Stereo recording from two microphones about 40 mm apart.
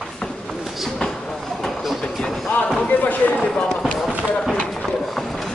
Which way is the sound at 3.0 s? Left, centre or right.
Left.